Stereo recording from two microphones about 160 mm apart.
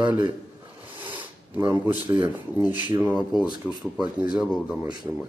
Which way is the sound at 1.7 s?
10° right (ahead or behind).